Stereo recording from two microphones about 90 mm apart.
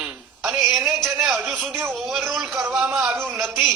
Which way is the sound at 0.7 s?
Centre (ahead or behind).